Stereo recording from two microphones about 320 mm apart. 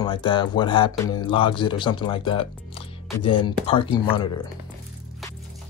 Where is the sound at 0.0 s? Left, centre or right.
Centre.